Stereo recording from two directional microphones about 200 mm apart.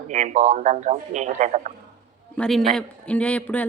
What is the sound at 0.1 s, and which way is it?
Speech, 35° right (ahead or behind).